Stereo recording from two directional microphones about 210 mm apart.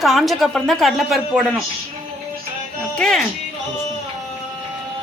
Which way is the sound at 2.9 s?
5° left (ahead or behind).